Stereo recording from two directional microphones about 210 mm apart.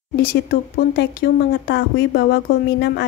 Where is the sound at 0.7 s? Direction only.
45° left (ahead or behind).